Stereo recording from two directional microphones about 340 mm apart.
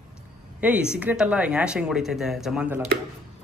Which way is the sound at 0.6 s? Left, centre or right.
Centre.